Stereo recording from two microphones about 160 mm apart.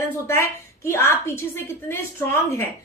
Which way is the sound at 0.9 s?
15° left (ahead or behind).